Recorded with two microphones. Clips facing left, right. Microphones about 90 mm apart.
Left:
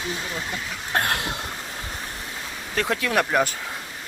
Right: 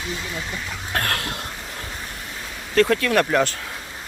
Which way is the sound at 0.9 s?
15° left (ahead or behind).